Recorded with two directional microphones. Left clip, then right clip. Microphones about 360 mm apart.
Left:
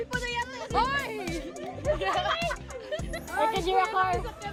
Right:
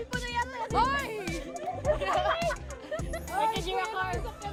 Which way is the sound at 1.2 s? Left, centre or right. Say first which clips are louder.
Even; centre.